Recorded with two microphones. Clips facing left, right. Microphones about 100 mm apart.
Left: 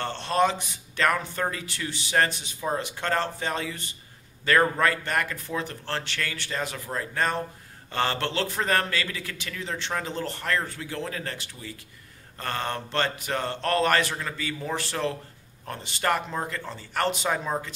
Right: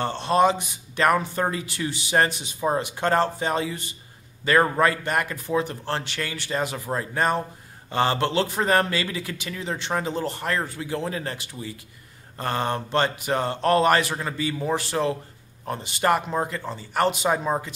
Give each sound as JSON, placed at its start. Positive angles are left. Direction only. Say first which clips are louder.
{"t": 0.0, "sound": "a man's voice", "louder": "right 4 dB", "side_deg": -15}